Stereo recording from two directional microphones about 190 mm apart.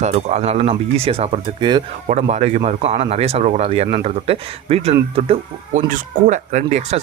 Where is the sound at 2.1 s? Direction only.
35° right (ahead or behind).